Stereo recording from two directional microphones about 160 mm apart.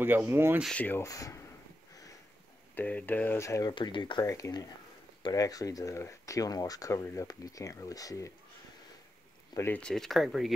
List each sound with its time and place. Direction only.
0.0 s speech: 10° right (ahead or behind)
0.6 s speech: 5° left (ahead or behind); by 1.4 s 20° left (ahead or behind)
2.7 s speech: 10° left (ahead or behind)
9.5 s speech: 15° left (ahead or behind)
9.8 s speech: 5° left (ahead or behind)